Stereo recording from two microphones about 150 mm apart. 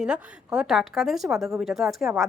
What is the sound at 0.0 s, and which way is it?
A woman's voice, 5° right (ahead or behind).